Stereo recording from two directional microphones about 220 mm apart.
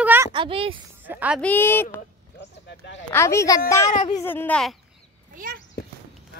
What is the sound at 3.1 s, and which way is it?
A woman's voice, 10° left (ahead or behind).